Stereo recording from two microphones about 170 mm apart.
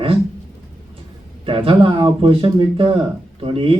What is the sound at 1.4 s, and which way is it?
Speech, 30° right (ahead or behind).